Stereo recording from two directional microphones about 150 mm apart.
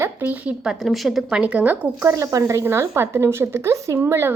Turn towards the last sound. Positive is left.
turn(degrees=-15)  # may be behind; listen again after turning